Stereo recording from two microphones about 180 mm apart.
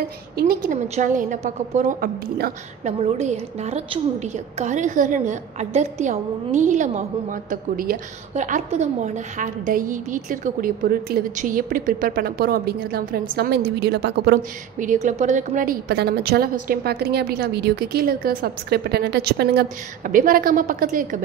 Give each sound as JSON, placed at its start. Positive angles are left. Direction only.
{"t": 0.4, "sound": "a woman's voice", "side_deg": -55}
{"t": 2.8, "sound": "a woman's voice", "side_deg": -40}
{"t": 13.7, "sound": "a woman's voice", "side_deg": -70}
{"t": 14.8, "sound": "a woman's voice", "side_deg": -45}
{"t": 20.1, "sound": "a woman's voice", "side_deg": -50}